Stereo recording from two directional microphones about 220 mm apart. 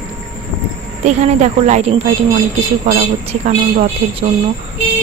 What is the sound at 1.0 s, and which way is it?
A woman's voice, 30° right (ahead or behind).